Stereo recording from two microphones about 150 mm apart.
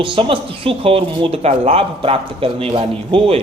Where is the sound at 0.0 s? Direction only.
35° right (ahead or behind).